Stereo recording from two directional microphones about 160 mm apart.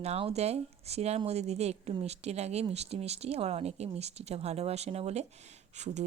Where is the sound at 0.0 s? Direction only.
40° right (ahead or behind).